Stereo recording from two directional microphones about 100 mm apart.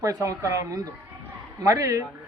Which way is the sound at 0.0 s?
35° right (ahead or behind).